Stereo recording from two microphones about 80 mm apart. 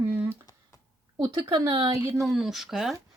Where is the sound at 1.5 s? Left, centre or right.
Right.